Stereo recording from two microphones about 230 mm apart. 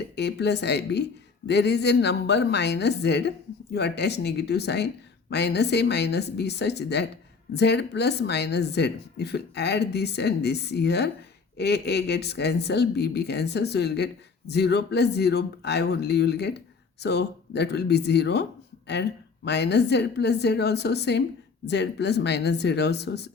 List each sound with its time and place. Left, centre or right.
0.2 s speech: left
19.5 s speech: left